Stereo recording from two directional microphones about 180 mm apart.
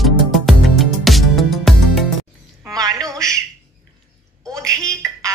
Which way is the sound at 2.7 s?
20° right (ahead or behind).